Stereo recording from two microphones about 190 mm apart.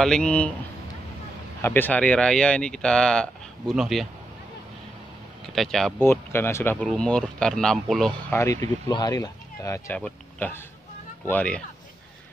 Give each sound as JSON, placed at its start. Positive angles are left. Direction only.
{"t": 0.0, "sound": "speech", "side_deg": 5}
{"t": 1.6, "sound": "speech", "side_deg": 10}
{"t": 5.5, "sound": "speech", "side_deg": 0}
{"t": 5.9, "sound": "speech", "side_deg": 10}
{"t": 8.4, "sound": "speech", "side_deg": 15}